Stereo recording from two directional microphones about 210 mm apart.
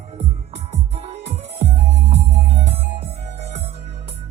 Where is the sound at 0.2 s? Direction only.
30° right (ahead or behind).